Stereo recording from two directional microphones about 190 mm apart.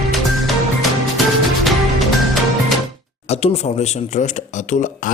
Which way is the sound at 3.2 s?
35° left (ahead or behind).